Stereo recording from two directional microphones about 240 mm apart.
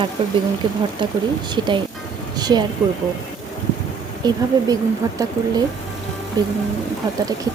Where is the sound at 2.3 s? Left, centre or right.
Centre.